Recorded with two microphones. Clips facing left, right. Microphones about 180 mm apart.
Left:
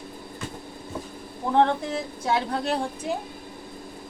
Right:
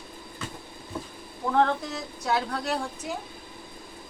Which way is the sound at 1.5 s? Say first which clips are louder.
Left 3 dB; 25° left (ahead or behind).